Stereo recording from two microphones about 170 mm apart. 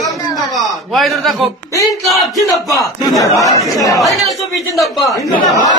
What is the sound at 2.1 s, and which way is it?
Speech, centre (ahead or behind).